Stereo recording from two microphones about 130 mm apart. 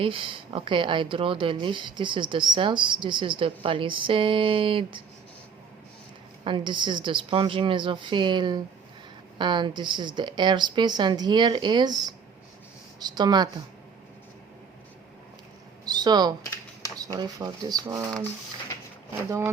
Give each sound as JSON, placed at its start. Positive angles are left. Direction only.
{"t": 0.0, "sound": "speech", "side_deg": -40}
{"t": 6.4, "sound": "speech", "side_deg": -40}
{"t": 15.9, "sound": "speech", "side_deg": -30}